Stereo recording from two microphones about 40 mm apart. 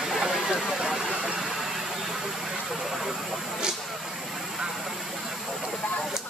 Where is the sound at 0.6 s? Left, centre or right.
Centre.